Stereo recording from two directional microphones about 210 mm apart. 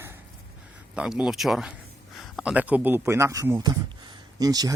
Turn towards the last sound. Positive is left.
turn(degrees=-15)  # may be behind; listen again after turning